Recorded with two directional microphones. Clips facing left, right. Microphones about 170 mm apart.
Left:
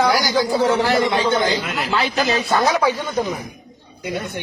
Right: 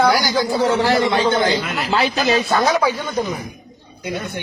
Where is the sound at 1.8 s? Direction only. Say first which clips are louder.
Right 3 dB; 30° right (ahead or behind).